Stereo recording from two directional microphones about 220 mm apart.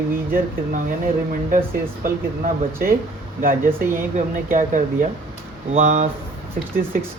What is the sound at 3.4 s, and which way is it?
Speech, 40° right (ahead or behind).